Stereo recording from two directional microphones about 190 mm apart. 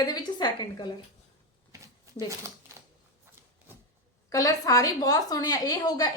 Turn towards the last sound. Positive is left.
turn(degrees=20)  # may be behind; listen again after turning